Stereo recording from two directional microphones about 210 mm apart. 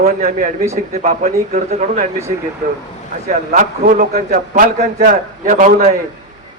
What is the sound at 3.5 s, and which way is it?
A man's voice, 40° right (ahead or behind).